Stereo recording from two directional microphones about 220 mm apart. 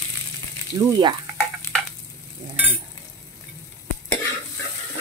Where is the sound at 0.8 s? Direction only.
15° right (ahead or behind).